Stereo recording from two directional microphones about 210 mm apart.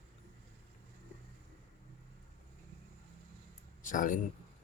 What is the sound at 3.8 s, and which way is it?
Speech, 40° left (ahead or behind).